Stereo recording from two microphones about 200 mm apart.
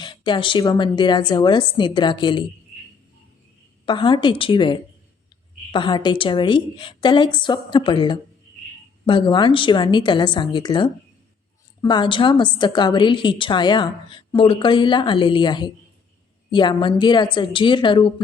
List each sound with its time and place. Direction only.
0.0 s a woman's voice: 25° left (ahead or behind)
3.8 s a woman's voice: 25° left (ahead or behind)